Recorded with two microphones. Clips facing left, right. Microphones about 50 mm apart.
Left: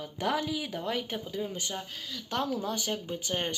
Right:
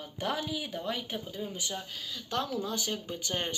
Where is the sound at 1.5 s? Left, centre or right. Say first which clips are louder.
Left 1 dB; left.